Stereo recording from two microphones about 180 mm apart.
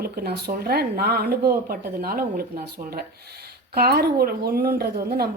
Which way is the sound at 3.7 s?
60° right (ahead or behind).